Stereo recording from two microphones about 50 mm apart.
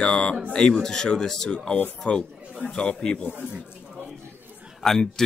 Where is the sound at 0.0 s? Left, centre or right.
Centre.